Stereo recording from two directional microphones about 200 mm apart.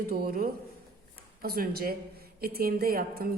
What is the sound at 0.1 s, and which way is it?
A woman's voice, 50° right (ahead or behind).